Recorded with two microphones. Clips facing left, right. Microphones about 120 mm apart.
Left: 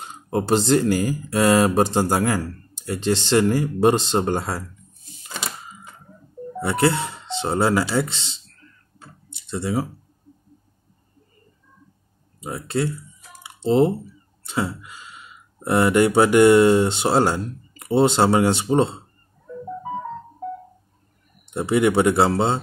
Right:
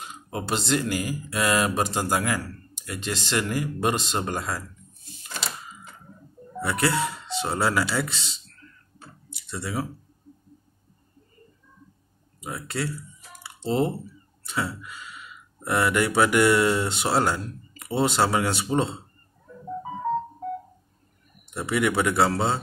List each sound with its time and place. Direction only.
0.0 s speech: 35° left (ahead or behind)
6.6 s speech: 25° left (ahead or behind)
9.3 s typing: 25° left (ahead or behind)
12.4 s speech: 25° left (ahead or behind)
21.5 s speech: 30° left (ahead or behind)